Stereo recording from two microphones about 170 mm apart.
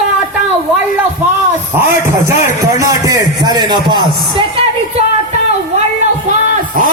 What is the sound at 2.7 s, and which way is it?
A man's voice, 20° right (ahead or behind).